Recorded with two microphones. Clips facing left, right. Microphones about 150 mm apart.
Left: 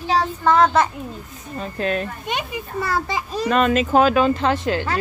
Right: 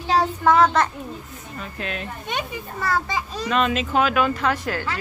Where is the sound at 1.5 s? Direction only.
35° left (ahead or behind).